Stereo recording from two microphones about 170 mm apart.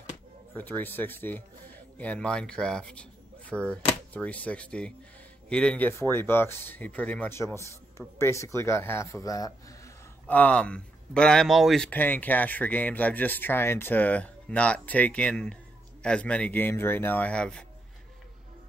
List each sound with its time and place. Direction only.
0.6 s speech: 10° left (ahead or behind)
10.2 s speech: 10° left (ahead or behind)